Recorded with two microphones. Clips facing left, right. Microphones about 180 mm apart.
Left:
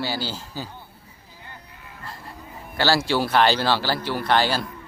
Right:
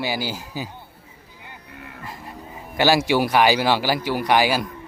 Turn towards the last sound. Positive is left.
turn(degrees=-10)  # may be behind; listen again after turning